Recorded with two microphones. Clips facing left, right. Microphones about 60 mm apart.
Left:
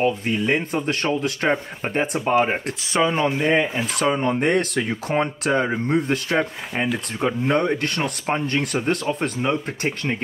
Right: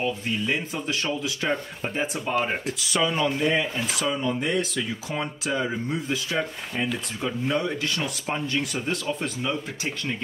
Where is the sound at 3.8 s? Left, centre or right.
Left.